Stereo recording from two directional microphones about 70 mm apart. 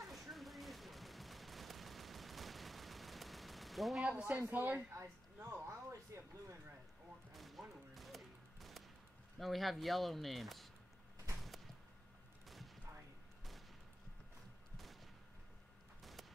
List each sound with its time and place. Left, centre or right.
0.0 s fusillade: centre
4.1 s speech: centre
4.9 s a sound: right
7.3 s fusillade: centre
9.4 s speech: centre
11.4 s a sound: centre
13.4 s fusillade: centre
14.8 s gunshot: centre
16.0 s a sound: centre